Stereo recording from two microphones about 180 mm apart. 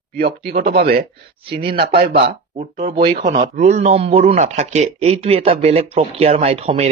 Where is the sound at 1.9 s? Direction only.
60° right (ahead or behind).